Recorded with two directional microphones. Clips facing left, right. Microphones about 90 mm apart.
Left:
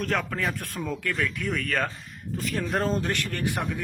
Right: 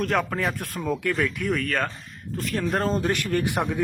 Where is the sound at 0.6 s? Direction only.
5° right (ahead or behind).